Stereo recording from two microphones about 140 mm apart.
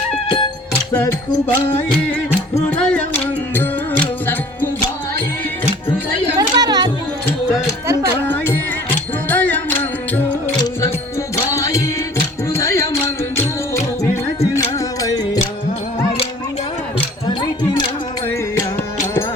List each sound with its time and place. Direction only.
1.0 s music: 15° left (ahead or behind)
6.3 s music: 30° right (ahead or behind)
9.3 s music: 10° left (ahead or behind)
11.5 s music: 25° left (ahead or behind)
17.2 s music: 30° left (ahead or behind)